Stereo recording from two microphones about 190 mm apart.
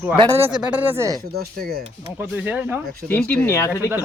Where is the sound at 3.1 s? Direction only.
10° left (ahead or behind).